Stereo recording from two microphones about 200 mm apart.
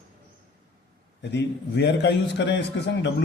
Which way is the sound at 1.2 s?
60° left (ahead or behind).